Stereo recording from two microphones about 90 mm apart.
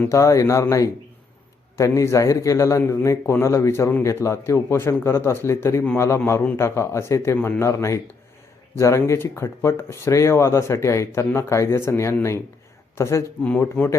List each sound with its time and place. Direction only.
0.1 s speech: 35° left (ahead or behind)
13.8 s speech: 15° left (ahead or behind)